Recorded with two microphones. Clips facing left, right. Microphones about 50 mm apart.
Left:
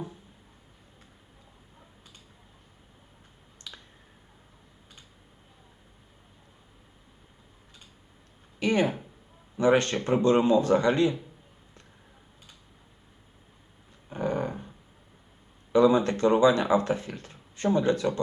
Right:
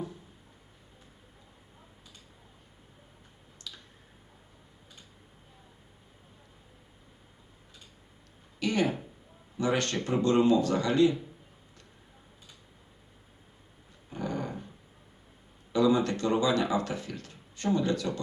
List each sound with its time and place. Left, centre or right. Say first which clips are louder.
3.7 s finger snapping: left 1 dB; left
8.5 s speech: left 3 dB; left
14.1 s a sound: left 5 dB; left
15.7 s speech: left 4 dB; left